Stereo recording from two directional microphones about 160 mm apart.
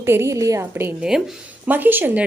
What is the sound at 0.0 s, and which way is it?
A woman's voice, 15° right (ahead or behind).